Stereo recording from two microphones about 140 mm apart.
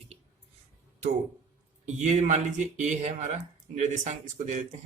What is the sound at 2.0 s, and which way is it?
Speech, 55° right (ahead or behind).